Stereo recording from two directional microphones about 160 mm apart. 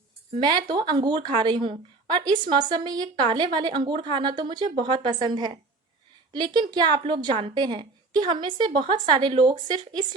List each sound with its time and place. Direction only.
0.3 s a woman's voice: 30° right (ahead or behind)